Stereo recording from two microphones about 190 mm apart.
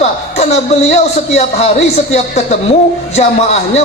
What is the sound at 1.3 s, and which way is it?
A man's voice, 35° left (ahead or behind).